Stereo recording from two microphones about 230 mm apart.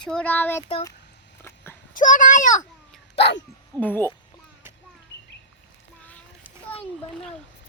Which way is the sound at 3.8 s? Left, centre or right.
Centre.